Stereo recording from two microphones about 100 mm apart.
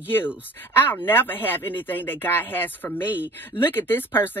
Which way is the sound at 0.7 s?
20° left (ahead or behind).